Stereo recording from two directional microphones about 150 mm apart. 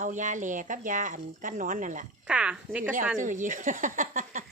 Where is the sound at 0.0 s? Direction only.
55° right (ahead or behind).